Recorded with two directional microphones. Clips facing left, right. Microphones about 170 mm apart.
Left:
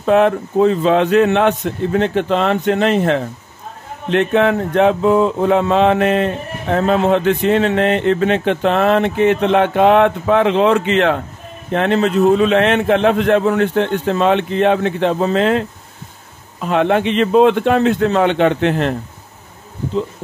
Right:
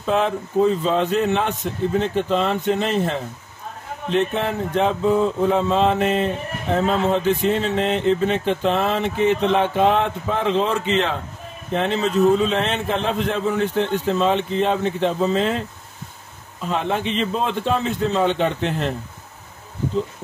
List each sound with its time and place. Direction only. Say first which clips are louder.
0.0 s a man's voice: left 8 dB; 60° left (ahead or behind)
4.1 s a sound: left 7 dB; 70° left (ahead or behind)
16.6 s a man's voice: left 8 dB; 65° left (ahead or behind)